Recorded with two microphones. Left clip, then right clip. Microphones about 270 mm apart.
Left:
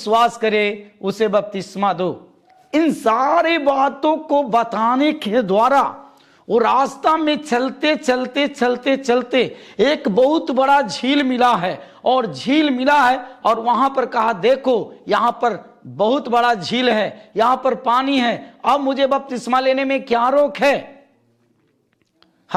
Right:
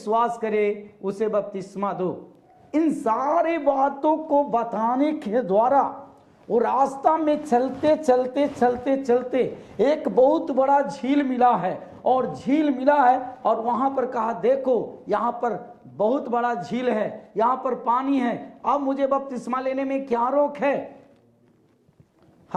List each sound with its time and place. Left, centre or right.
0.0 s a man's voice: left